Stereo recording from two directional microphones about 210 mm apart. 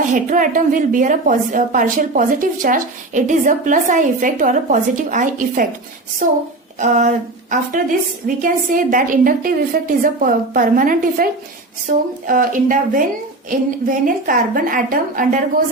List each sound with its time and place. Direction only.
0.1 s a woman's voice: 40° right (ahead or behind)
6.7 s a woman's voice: 35° right (ahead or behind)